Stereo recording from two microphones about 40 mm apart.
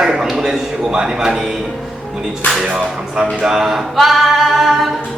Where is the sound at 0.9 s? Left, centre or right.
Right.